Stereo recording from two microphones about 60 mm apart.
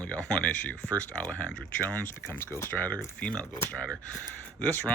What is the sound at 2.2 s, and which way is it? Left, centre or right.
Speech, left.